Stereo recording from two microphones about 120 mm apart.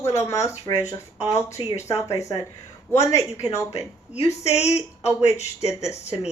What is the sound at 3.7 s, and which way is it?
A woman's voice, 60° left (ahead or behind).